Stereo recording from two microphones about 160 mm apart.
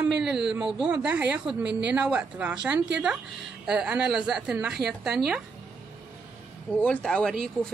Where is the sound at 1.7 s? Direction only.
90° right.